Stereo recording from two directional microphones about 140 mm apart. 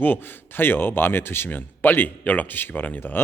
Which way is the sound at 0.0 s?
15° left (ahead or behind).